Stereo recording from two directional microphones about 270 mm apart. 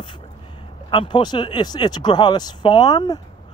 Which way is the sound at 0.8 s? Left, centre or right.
Centre.